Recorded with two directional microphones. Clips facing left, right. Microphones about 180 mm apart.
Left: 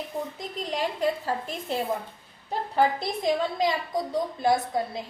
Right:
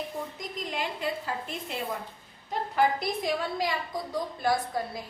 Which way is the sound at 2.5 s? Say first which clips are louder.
Left 2 dB; 30° left (ahead or behind).